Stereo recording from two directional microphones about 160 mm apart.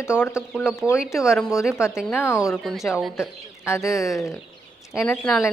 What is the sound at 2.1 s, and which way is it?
Speech, 15° left (ahead or behind).